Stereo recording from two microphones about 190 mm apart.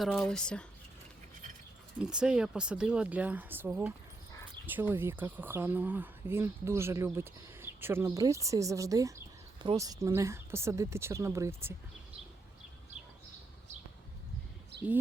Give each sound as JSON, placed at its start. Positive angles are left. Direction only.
{"t": 0.0, "sound": "speech", "side_deg": 0}
{"t": 2.0, "sound": "speech", "side_deg": -5}